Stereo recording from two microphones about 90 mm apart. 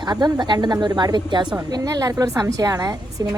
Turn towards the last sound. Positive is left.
turn(degrees=-45)  # may be behind; listen again after turning